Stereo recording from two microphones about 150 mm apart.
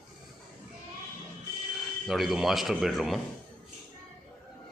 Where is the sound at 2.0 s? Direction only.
Centre (ahead or behind).